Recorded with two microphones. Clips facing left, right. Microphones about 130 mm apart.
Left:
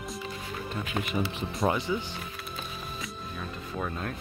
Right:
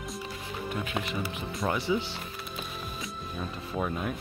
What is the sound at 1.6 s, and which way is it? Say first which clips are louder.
Speech: left 3 dB; 35° left (ahead or behind).